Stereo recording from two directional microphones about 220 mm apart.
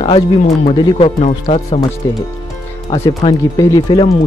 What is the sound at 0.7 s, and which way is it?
Speech, 20° left (ahead or behind).